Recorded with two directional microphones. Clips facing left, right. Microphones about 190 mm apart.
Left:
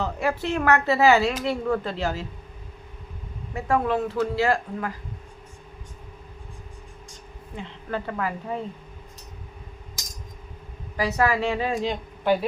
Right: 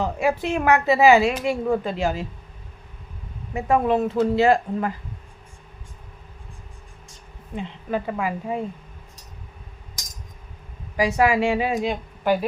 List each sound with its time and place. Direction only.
0.0 s a woman's voice: 15° right (ahead or behind)
3.5 s speech: 15° right (ahead or behind)
7.5 s a woman's voice: 15° right (ahead or behind)
10.9 s a woman's voice: 15° right (ahead or behind)